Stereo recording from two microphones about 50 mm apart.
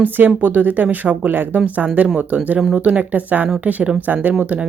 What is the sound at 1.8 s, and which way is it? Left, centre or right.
Speech, right.